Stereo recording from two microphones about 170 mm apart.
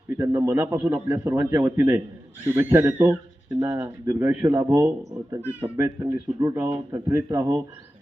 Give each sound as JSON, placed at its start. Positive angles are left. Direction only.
{"t": 0.2, "sound": "speech", "side_deg": -15}